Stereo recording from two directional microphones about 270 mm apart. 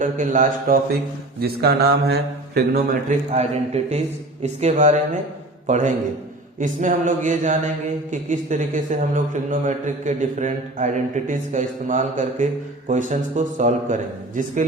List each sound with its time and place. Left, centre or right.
0.0 s a man's voice: right
1.4 s mantra: right
2.6 s a man's voice: right